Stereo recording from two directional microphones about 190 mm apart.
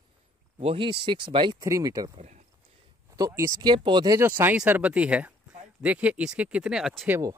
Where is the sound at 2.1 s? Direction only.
35° right (ahead or behind).